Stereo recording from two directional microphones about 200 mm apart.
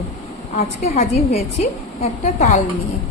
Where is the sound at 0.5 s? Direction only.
35° left (ahead or behind).